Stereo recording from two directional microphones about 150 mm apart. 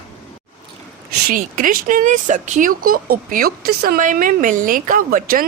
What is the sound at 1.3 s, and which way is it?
Speech, 65° right (ahead or behind).